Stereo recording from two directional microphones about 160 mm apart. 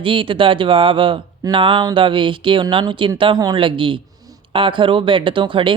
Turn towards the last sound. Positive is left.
turn(degrees=-30)  # may be behind; listen again after turning